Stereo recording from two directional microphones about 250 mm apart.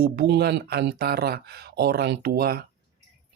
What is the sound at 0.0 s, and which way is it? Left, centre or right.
Speech, right.